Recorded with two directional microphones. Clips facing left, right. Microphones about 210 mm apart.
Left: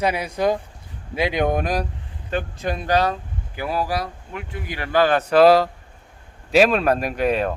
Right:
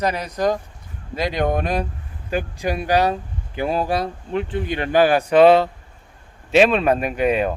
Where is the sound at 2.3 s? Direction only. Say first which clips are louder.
Right 2 dB; 10° right (ahead or behind).